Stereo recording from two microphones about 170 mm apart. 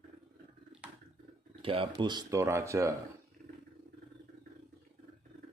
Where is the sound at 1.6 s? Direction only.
35° right (ahead or behind); by 2.9 s 15° right (ahead or behind).